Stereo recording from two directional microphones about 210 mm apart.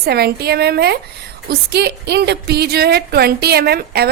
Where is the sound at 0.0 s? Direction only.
50° right (ahead or behind).